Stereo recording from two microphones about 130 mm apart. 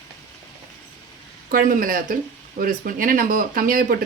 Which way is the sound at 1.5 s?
90° right.